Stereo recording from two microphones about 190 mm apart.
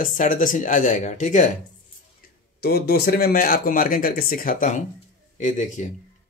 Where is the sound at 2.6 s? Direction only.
55° left (ahead or behind); by 5.9 s 40° left (ahead or behind).